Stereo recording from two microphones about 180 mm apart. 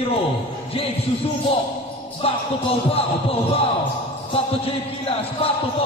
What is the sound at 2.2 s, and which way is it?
Speech, 30° left (ahead or behind).